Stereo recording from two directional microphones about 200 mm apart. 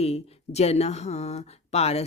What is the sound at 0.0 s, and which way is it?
Speech, 30° left (ahead or behind).